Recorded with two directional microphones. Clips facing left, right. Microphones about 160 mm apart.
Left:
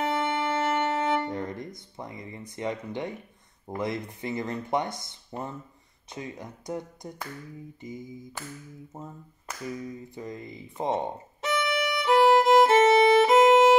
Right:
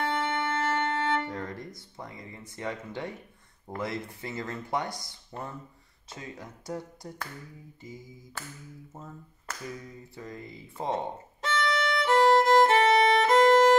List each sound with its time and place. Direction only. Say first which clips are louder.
0.0 s music: left 2 dB; 15° left (ahead or behind)
3.6 s speech: left 3 dB; 20° left (ahead or behind)
7.8 s a sound: left 5 dB; 15° left (ahead or behind)
8.9 s finger snapping: left 5 dB; 20° left (ahead or behind)
10.1 s speech: left 4 dB; 20° left (ahead or behind)
11.4 s violin: left 1 dB; 15° left (ahead or behind)